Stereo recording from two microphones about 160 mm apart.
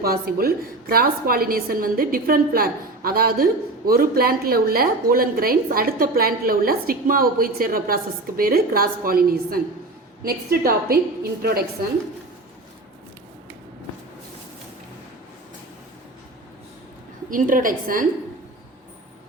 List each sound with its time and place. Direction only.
0.0 s a woman's voice: 70° right (ahead or behind)
17.2 s a woman's voice: 55° right (ahead or behind)